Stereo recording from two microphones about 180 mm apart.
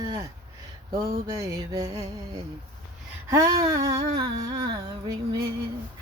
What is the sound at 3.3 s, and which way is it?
Female singing, 20° right (ahead or behind).